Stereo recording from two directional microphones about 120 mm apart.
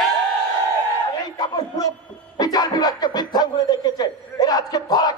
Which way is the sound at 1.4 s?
30° left (ahead or behind).